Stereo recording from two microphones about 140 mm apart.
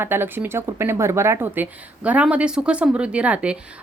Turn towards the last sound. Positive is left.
turn(degrees=-10)  # may be behind; listen again after turning